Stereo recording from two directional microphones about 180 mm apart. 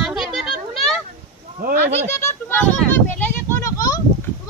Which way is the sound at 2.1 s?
15° left (ahead or behind).